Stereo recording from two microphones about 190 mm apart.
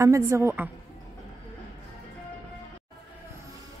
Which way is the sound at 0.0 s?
15° right (ahead or behind).